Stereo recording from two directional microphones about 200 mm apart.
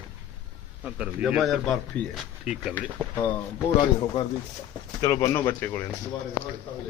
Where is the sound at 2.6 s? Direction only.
5° right (ahead or behind).